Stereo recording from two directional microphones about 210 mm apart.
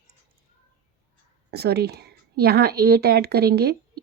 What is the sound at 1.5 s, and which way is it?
Speech, 50° right (ahead or behind).